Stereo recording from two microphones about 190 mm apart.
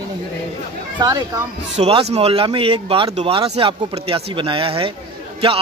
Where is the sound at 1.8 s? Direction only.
35° right (ahead or behind).